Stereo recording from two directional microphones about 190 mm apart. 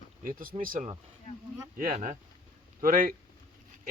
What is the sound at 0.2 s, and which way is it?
Speech, 45° right (ahead or behind).